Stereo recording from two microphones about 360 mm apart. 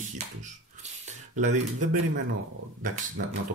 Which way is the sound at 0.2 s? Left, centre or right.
Centre.